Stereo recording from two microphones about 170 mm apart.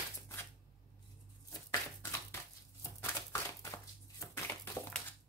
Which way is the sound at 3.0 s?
15° left (ahead or behind).